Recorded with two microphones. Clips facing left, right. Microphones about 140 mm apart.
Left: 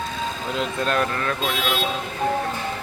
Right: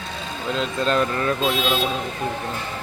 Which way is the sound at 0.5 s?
5° left (ahead or behind).